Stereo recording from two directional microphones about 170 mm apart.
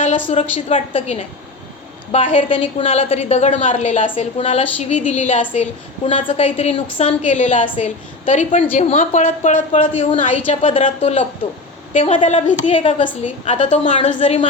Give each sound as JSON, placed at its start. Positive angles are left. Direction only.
{"t": 0.3, "sound": "a woman's voice", "side_deg": 30}
{"t": 6.1, "sound": "a woman's voice", "side_deg": 30}
{"t": 9.8, "sound": "a woman's voice", "side_deg": 30}
{"t": 12.7, "sound": "a woman's voice", "side_deg": 30}